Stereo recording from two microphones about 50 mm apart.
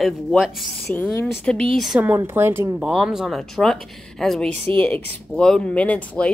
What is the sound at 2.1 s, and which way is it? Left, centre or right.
Speech, right.